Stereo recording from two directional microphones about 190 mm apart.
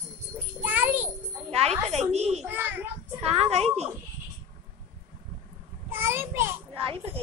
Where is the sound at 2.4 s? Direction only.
10° right (ahead or behind).